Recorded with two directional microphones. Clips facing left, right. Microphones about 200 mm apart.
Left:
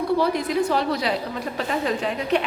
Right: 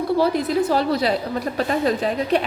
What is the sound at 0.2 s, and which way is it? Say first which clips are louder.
A woman's voice: right 3 dB; 35° right (ahead or behind).